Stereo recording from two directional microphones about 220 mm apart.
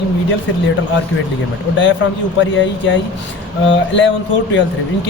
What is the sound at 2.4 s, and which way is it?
Speech, 60° left (ahead or behind).